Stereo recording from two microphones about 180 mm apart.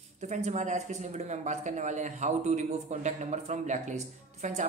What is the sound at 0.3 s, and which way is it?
Speech, 40° right (ahead or behind).